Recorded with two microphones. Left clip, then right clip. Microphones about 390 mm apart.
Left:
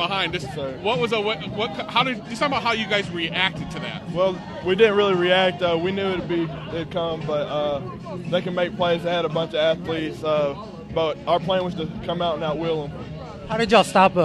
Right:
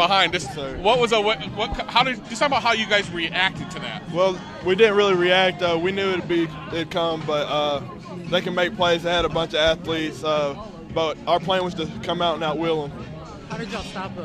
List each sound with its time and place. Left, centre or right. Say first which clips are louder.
0.0 s speech: right 5 dB; right
4.1 s a man's voice: right 1 dB; centre
13.6 s a man's voice: left 16 dB; left